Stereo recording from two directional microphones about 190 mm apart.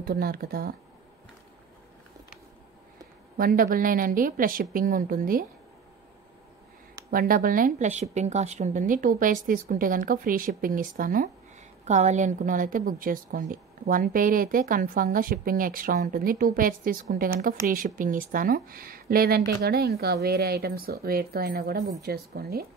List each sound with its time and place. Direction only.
0.0 s a woman's voice: 50° right (ahead or behind)
3.3 s a woman's voice: 50° right (ahead or behind)
7.1 s a woman's voice: 50° right (ahead or behind)